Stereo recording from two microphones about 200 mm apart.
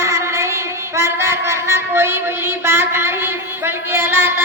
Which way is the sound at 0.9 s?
15° right (ahead or behind).